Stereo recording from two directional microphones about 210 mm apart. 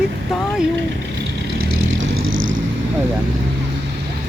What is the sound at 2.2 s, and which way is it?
Vehicle, 65° right (ahead or behind).